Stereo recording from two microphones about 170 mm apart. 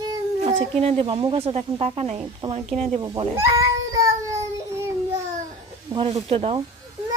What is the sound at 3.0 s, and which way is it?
Speech, 20° right (ahead or behind).